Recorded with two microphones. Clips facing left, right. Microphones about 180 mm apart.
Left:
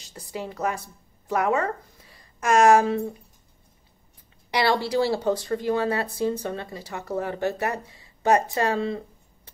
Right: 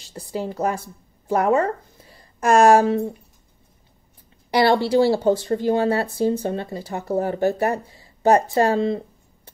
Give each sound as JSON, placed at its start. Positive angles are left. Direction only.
{"t": 0.1, "sound": "speech", "side_deg": -35}
{"t": 4.5, "sound": "speech", "side_deg": -30}